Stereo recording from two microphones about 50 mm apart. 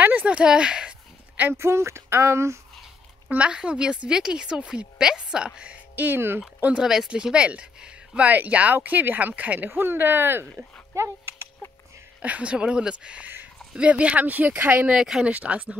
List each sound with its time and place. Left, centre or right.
0.0 s a sound: right
0.3 s speech: centre
1.5 s speech: right
3.3 s a woman's voice: right
5.9 s speech: right
6.7 s a woman's voice: centre; by 9.7 s right
9.7 s speech: right
12.2 s speech: right
14.9 s a woman's voice: centre
15.2 s speech: right